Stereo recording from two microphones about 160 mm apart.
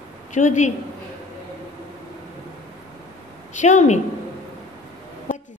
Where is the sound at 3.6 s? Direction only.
50° left (ahead or behind).